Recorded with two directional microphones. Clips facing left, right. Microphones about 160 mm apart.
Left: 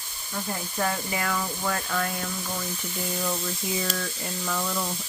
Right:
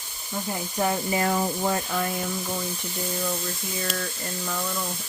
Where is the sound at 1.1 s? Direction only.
30° right (ahead or behind).